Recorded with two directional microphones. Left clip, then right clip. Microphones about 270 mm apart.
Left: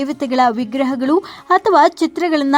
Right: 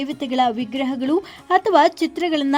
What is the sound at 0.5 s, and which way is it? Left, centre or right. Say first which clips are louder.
Speech: left 5 dB; centre.